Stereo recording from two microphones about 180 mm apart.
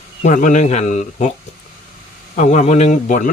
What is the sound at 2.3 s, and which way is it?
Speech, 40° left (ahead or behind).